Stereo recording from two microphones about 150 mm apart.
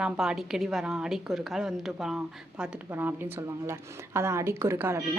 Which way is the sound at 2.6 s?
15° right (ahead or behind).